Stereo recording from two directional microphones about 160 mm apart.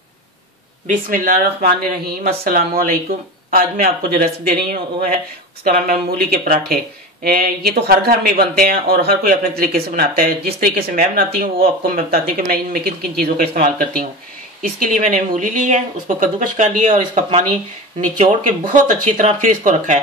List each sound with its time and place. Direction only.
0.8 s speech: 60° right (ahead or behind)